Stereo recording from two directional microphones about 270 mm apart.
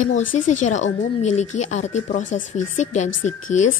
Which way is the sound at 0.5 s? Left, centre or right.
Left.